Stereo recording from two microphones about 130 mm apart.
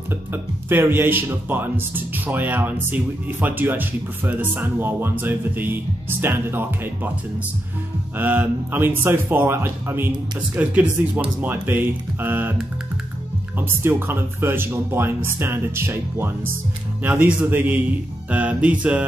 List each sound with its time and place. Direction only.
0.1 s speech: 15° right (ahead or behind)
8.2 s speech: 15° right (ahead or behind)
13.6 s speech: 15° right (ahead or behind)